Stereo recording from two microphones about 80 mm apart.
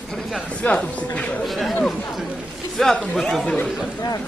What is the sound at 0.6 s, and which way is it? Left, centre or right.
Speech, centre.